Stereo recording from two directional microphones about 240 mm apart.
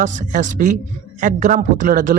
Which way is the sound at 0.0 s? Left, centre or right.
Right.